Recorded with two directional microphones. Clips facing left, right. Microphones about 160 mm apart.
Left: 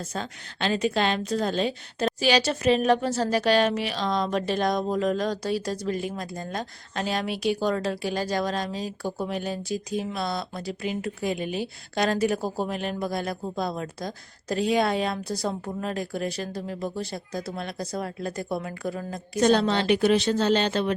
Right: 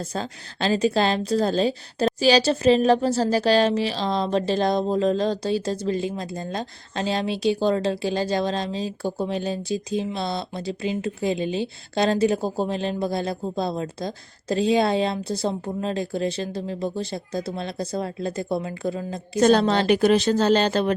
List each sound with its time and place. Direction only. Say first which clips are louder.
0.1 s a woman's voice: right 3 dB; 35° right (ahead or behind)
19.4 s a woman's voice: right 3 dB; 45° right (ahead or behind)